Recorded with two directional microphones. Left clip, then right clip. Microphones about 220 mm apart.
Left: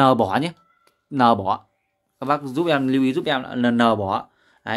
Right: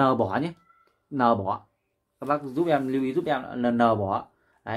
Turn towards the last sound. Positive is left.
turn(degrees=40)  # may be behind; listen again after turning